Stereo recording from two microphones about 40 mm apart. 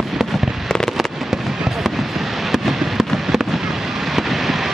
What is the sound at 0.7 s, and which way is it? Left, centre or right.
Fireworks, centre.